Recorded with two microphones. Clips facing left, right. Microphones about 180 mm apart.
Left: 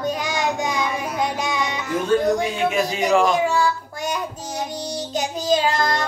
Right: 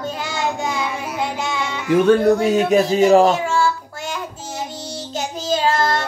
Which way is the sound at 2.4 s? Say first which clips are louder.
Right 6 dB; 40° right (ahead or behind).